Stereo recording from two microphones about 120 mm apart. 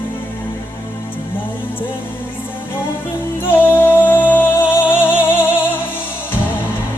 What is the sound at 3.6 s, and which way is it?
Music, 20° left (ahead or behind).